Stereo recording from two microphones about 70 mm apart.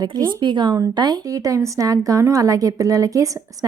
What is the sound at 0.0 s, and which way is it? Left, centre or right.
Speech, right.